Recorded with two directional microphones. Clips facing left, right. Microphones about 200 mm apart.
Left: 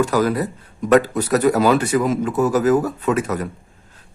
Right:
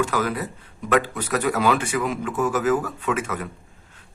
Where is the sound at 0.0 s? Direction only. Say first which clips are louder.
Left 6 dB; 40° left (ahead or behind).